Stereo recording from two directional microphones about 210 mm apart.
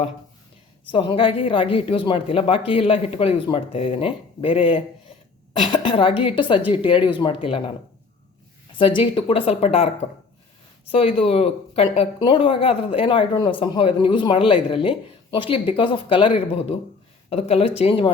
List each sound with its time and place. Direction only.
0.9 s speech: 25° left (ahead or behind)
8.8 s speech: 25° left (ahead or behind)
10.9 s speech: 25° left (ahead or behind)